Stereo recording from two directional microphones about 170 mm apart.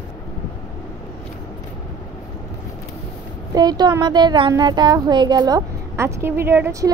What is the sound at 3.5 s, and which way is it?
Speech, 20° right (ahead or behind).